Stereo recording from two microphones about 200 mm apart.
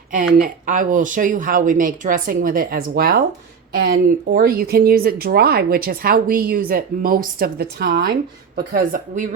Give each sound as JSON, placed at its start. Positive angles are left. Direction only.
{"t": 0.1, "sound": "speech", "side_deg": -40}